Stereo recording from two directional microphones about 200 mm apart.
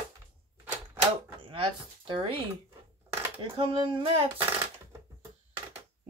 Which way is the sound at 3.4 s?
25° right (ahead or behind).